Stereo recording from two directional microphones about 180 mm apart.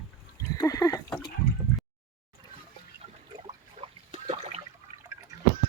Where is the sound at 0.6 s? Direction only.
20° left (ahead or behind).